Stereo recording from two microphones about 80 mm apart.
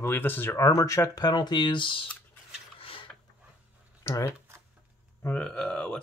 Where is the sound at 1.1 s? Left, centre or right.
Left.